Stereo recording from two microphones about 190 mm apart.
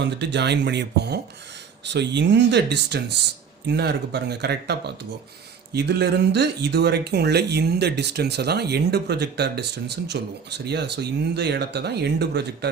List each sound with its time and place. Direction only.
0.0 s speech: 65° right (ahead or behind)